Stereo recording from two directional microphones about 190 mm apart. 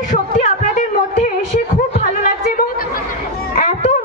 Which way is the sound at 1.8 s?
50° left (ahead or behind).